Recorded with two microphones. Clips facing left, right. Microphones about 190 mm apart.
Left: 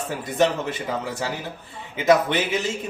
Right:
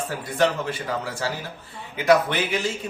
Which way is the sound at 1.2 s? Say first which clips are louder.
Even; 15° left (ahead or behind).